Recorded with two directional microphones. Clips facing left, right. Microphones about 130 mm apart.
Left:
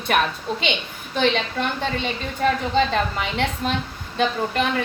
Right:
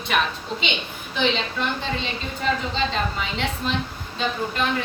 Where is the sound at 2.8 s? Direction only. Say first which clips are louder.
Left 6 dB; 50° left (ahead or behind).